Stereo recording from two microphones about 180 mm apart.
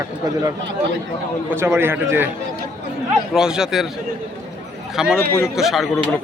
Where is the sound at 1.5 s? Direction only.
15° right (ahead or behind).